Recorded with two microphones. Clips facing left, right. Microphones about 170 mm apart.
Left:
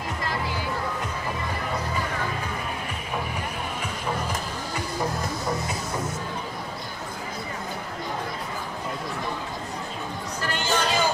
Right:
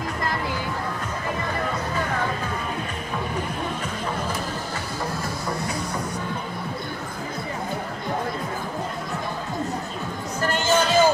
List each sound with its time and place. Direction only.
10.4 s music: 45° right (ahead or behind)